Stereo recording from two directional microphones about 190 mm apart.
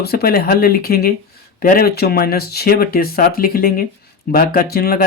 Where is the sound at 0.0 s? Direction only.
55° left (ahead or behind).